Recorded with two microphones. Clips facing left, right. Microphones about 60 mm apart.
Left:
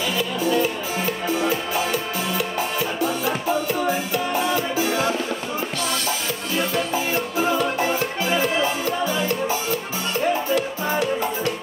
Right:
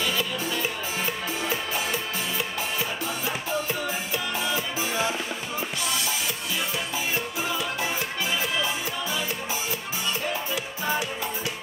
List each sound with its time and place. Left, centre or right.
7.6 s music: left
10.5 s music: centre